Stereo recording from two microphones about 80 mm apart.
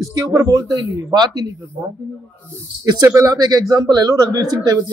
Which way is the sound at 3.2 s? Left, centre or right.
Right.